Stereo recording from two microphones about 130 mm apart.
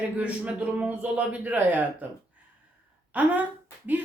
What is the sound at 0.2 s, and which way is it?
Speech, 10° right (ahead or behind).